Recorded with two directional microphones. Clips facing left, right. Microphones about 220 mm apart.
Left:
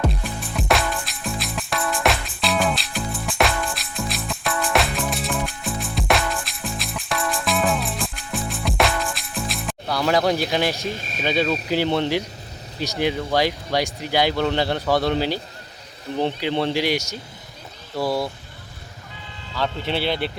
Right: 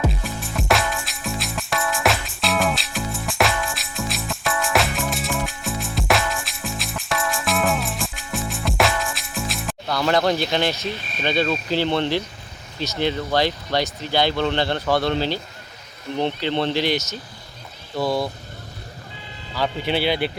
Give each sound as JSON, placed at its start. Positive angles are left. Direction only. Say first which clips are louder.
{"t": 0.0, "sound": "music", "louder": "even", "side_deg": 0}
{"t": 10.8, "sound": "speech", "louder": "even", "side_deg": 45}
{"t": 11.2, "sound": "speech", "louder": "even", "side_deg": 5}
{"t": 19.5, "sound": "speech", "louder": "right 2 dB", "side_deg": -5}